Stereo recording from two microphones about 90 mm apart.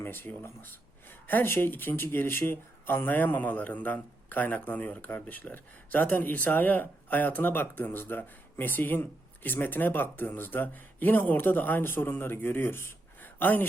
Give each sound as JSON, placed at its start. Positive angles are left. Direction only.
{"t": 0.0, "sound": "speech", "side_deg": 25}